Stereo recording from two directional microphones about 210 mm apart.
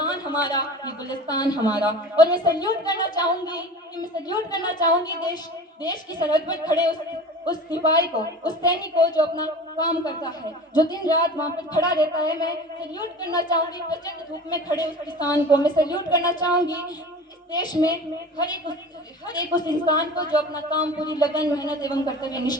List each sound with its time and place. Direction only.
0.0 s a woman's voice: 20° left (ahead or behind)
19.3 s a woman's voice: 20° left (ahead or behind)